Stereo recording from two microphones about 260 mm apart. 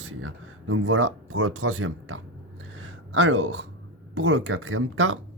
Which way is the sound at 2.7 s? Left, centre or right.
Right.